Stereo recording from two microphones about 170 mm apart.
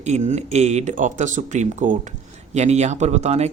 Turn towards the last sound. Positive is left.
turn(degrees=-40)  # may be behind; listen again after turning